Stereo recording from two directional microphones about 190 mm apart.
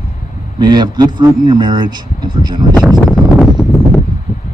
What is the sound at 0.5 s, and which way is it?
A man's voice, 20° right (ahead or behind).